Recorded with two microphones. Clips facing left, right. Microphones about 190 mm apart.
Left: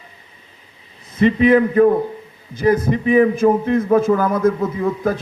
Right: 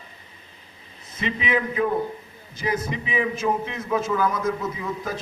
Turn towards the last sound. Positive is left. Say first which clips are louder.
# left 9 dB
turn(degrees=55)  # may be behind; listen again after turning